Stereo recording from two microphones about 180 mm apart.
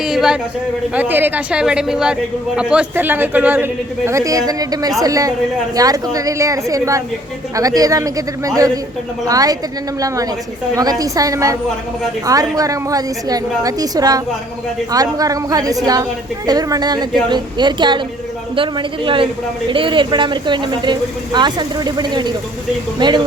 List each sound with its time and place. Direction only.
0.0 s a sound: centre (ahead or behind)
0.9 s a man's voice: 10° right (ahead or behind)
10.8 s speech: 20° right (ahead or behind)